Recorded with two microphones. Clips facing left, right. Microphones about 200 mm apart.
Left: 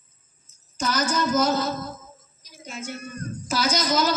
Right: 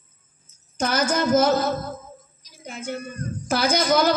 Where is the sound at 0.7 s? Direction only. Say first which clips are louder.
Right 2 dB; 55° right (ahead or behind).